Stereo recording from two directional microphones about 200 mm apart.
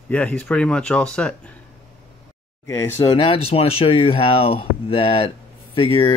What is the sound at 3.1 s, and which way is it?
Speech, 30° left (ahead or behind).